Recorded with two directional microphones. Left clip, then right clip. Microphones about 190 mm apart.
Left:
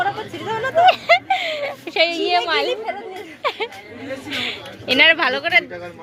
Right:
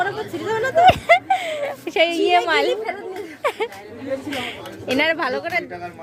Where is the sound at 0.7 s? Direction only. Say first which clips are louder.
Even; 20° right (ahead or behind).